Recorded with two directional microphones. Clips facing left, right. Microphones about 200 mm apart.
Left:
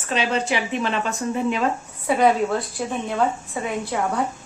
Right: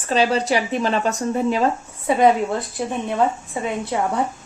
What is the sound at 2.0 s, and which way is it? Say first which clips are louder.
Speech: right 2 dB; 20° right (ahead or behind).